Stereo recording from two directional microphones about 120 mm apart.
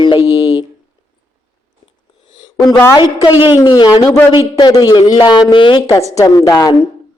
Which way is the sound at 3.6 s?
30° left (ahead or behind).